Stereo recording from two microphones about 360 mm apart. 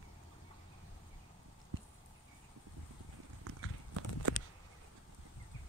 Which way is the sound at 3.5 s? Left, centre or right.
Right.